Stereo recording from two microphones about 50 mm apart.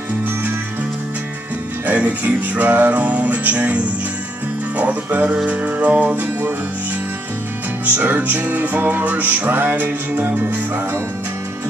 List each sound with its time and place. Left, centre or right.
1.9 s music: right
7.8 s music: right
10.2 s music: right